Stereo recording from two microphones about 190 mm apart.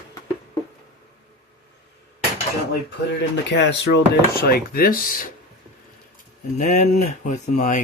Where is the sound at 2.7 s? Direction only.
65° left (ahead or behind); by 5.3 s 50° left (ahead or behind).